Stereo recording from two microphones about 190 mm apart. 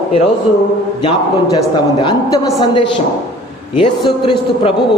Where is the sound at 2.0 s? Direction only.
20° left (ahead or behind).